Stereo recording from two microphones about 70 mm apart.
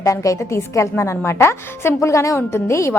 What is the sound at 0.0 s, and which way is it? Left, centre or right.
A woman's voice, left.